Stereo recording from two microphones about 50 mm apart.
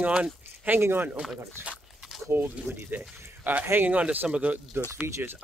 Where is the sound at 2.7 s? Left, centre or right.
Centre.